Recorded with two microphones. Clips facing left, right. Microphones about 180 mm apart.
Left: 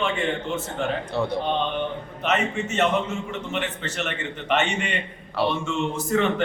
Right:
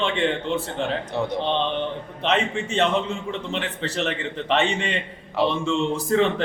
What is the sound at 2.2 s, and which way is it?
A man's voice, 30° right (ahead or behind).